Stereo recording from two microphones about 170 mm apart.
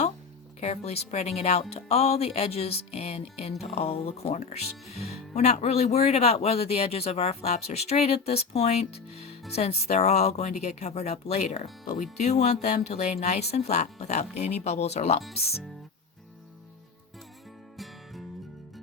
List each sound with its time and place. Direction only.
0.6 s speech: 40° left (ahead or behind)
17.7 s music: centre (ahead or behind)